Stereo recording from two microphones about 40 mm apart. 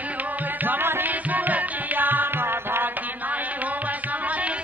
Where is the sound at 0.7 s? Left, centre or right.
Right.